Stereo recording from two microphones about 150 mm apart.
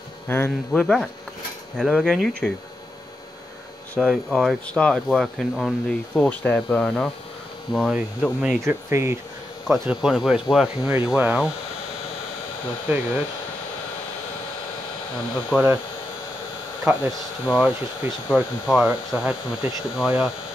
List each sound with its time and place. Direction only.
0.3 s speech: 10° left (ahead or behind)
3.9 s speech: 5° left (ahead or behind)
8.6 s speech: 15° right (ahead or behind)
9.7 s speech: centre (ahead or behind)
15.5 s speech: 10° right (ahead or behind)
16.8 s speech: 10° right (ahead or behind)